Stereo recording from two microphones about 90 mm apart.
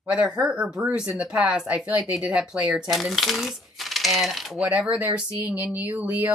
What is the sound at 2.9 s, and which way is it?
Coin, centre (ahead or behind).